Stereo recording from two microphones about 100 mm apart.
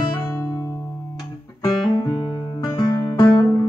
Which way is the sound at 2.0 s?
50° left (ahead or behind).